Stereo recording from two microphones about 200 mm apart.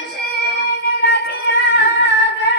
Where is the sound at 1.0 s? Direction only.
55° left (ahead or behind).